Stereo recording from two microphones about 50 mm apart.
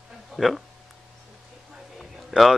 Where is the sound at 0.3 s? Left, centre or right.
Centre.